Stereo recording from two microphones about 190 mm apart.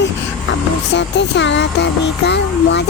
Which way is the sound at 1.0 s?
70° left (ahead or behind).